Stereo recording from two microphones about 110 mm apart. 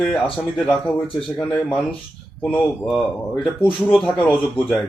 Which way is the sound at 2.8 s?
5° left (ahead or behind).